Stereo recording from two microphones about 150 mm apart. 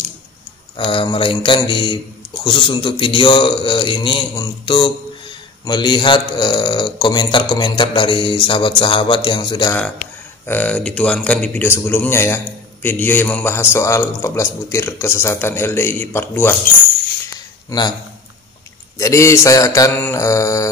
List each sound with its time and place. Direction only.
0.7 s a man's voice: 35° left (ahead or behind)
10.4 s a man's voice: 10° left (ahead or behind)
17.6 s speech: 30° left (ahead or behind)
18.9 s a man's voice: 20° left (ahead or behind)